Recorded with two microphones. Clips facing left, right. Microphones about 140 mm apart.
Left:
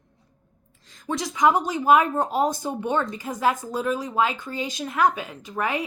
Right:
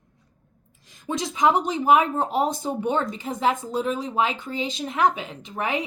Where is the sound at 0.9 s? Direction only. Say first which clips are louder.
Even; 20° right (ahead or behind).